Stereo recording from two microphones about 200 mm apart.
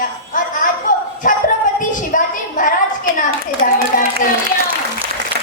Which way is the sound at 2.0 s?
40° left (ahead or behind).